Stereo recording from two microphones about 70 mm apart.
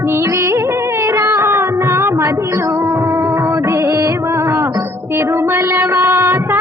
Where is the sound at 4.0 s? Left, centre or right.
Right.